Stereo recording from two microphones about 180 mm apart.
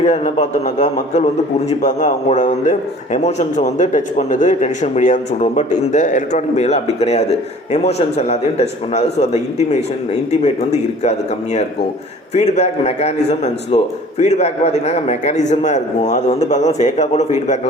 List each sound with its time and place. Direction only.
0.0 s a man's voice: 40° left (ahead or behind)